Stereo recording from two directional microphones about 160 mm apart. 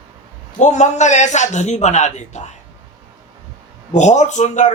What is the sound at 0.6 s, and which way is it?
Speech, 50° left (ahead or behind).